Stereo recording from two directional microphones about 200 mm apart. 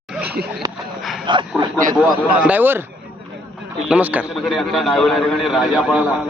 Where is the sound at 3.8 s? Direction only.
5° right (ahead or behind).